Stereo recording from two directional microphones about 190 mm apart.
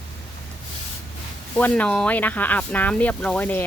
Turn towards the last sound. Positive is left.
turn(degrees=10)  # may be behind; listen again after turning